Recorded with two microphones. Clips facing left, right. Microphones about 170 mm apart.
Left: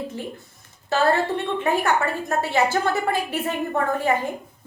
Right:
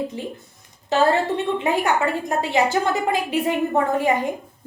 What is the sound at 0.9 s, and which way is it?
A woman's voice, 15° right (ahead or behind).